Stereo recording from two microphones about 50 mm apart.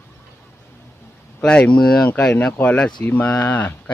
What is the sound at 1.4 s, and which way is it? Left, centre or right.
Speech, centre.